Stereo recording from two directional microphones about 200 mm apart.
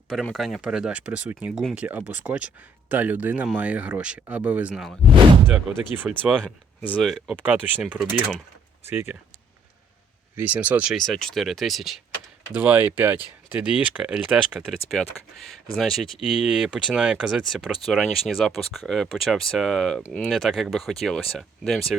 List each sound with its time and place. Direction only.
0.1 s speech: centre (ahead or behind)
6.0 s speech: 5° right (ahead or behind)
6.4 s speech: 5° left (ahead or behind); by 9.1 s 10° right (ahead or behind)
10.3 s speech: 5° right (ahead or behind)
15.8 s speech: centre (ahead or behind)